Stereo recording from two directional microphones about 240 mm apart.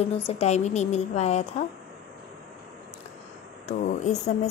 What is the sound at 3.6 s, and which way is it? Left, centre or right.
Speech, left.